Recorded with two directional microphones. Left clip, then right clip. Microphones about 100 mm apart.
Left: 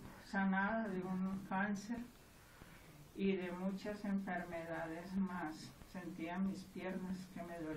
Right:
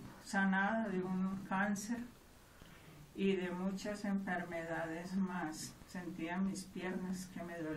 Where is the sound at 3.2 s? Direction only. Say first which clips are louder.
Right 3 dB; 15° right (ahead or behind).